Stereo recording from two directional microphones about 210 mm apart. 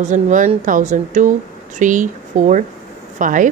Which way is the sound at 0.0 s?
35° right (ahead or behind).